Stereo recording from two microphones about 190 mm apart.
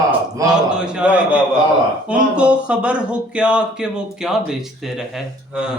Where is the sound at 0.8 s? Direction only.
5° right (ahead or behind).